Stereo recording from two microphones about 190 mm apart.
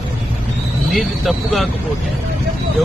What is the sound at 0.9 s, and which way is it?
Speech, centre (ahead or behind).